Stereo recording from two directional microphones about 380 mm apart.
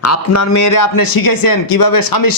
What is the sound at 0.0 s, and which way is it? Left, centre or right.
Speech, left.